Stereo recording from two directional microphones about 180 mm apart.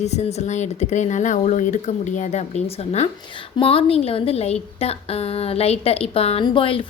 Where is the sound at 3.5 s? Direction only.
30° left (ahead or behind).